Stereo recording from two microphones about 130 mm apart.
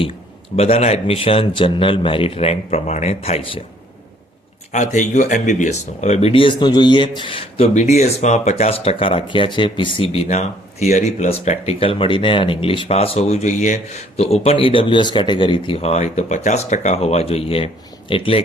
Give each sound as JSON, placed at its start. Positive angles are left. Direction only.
{"t": 0.0, "sound": "speech", "side_deg": 45}
{"t": 4.7, "sound": "speech", "side_deg": 65}
{"t": 7.7, "sound": "speech", "side_deg": 65}